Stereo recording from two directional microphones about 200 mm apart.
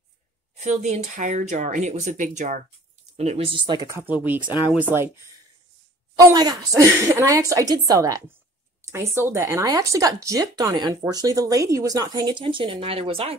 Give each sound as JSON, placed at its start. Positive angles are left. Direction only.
{"t": 0.6, "sound": "speech", "side_deg": -35}
{"t": 4.0, "sound": "speech", "side_deg": -10}
{"t": 6.1, "sound": "speech", "side_deg": -20}